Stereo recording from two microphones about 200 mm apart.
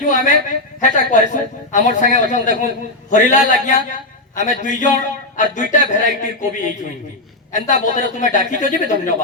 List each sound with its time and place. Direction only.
0.0 s a man's voice: 40° left (ahead or behind)